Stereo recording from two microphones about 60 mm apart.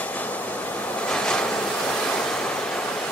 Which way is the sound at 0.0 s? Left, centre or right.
Left.